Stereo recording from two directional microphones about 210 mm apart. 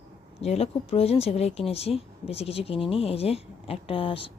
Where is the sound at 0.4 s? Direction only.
30° left (ahead or behind).